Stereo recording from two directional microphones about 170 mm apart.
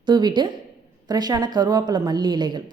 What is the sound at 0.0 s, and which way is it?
A woman's voice, 25° right (ahead or behind).